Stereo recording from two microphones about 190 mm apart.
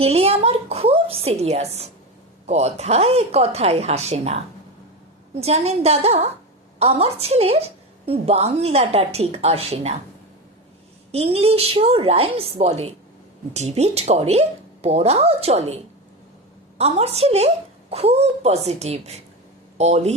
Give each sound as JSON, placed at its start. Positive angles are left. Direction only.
{"t": 0.0, "sound": "a woman's voice", "side_deg": -30}
{"t": 11.1, "sound": "a woman's voice", "side_deg": -30}